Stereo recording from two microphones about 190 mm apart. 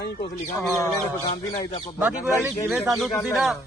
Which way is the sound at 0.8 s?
20° left (ahead or behind).